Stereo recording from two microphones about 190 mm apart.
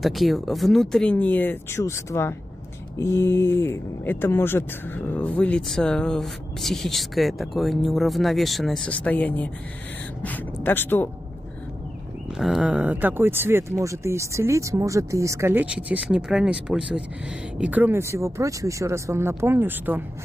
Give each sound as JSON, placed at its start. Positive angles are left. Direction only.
{"t": 0.0, "sound": "speech", "side_deg": 0}
{"t": 12.3, "sound": "speech", "side_deg": 0}